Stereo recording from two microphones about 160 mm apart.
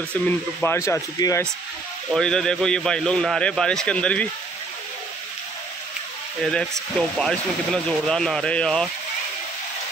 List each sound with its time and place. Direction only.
0.7 s speech: 15° left (ahead or behind)
2.1 s a man's voice: 5° left (ahead or behind)
6.4 s a man's voice: 5° left (ahead or behind)